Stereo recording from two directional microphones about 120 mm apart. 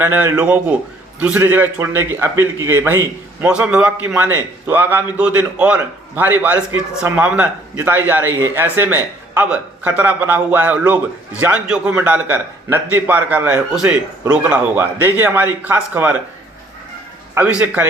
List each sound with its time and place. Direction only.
0.0 s a man's voice: 15° right (ahead or behind)
17.3 s a man's voice: 10° right (ahead or behind)